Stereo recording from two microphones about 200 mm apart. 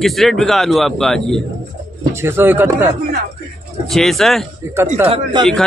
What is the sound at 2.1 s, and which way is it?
Speech, 10° right (ahead or behind).